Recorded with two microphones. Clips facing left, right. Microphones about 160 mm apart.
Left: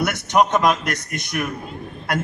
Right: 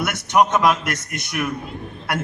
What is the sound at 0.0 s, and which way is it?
A man's voice, 40° left (ahead or behind).